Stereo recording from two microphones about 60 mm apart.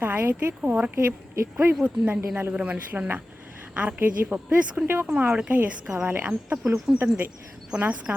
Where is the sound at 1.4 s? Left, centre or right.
Right.